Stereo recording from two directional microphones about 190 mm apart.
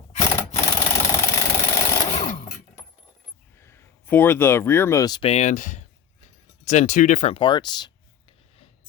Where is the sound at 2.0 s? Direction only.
35° left (ahead or behind).